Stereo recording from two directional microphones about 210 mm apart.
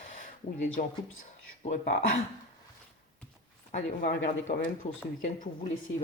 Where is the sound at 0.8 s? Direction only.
40° left (ahead or behind).